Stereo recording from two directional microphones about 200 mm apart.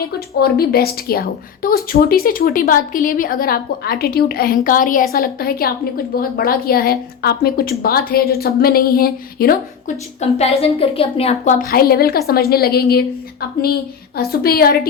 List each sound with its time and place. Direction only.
0.3 s a woman's voice: 50° left (ahead or behind)
10.2 s a woman's voice: 30° left (ahead or behind); by 14.8 s 50° left (ahead or behind)